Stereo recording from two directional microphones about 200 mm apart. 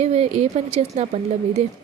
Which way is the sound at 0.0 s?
30° right (ahead or behind).